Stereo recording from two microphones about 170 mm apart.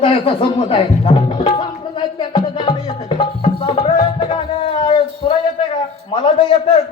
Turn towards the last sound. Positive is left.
turn(degrees=30)  # may be behind; listen again after turning